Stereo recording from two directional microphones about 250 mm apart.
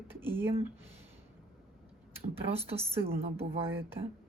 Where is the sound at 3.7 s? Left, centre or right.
Centre.